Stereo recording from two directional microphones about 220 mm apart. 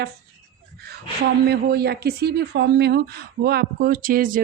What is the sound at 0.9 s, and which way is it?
Speech, 45° right (ahead or behind).